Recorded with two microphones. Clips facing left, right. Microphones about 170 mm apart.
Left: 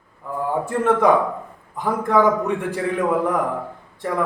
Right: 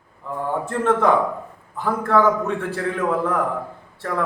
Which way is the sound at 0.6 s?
10° left (ahead or behind).